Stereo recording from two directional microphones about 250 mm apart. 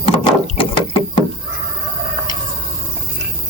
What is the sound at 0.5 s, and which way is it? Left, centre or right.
Rowboat, left.